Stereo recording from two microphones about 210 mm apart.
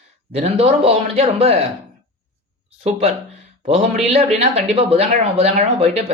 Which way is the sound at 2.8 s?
30° right (ahead or behind).